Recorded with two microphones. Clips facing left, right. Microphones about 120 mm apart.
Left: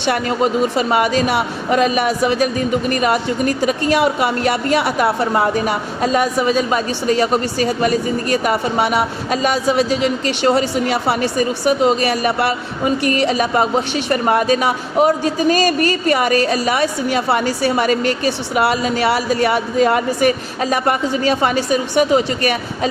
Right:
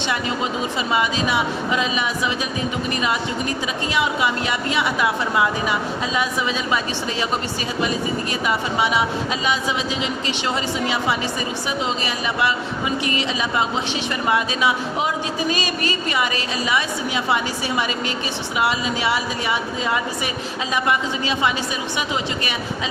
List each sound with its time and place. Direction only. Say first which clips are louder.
0.1 s speech: left 9 dB; 50° left (ahead or behind)